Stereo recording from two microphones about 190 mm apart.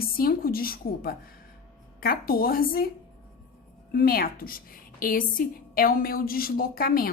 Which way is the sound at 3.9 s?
50° left (ahead or behind).